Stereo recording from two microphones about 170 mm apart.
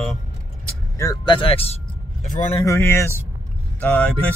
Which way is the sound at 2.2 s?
45° left (ahead or behind).